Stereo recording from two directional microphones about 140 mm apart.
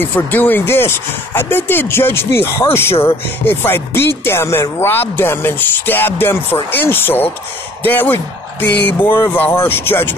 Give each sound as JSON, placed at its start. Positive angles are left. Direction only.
{"t": 0.1, "sound": "speech", "side_deg": 15}